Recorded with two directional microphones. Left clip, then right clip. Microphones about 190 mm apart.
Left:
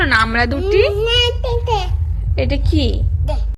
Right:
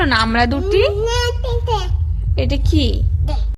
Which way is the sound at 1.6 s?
15° right (ahead or behind).